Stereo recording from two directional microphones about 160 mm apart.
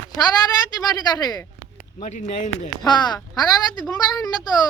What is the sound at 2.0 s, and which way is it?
Speech, 50° left (ahead or behind).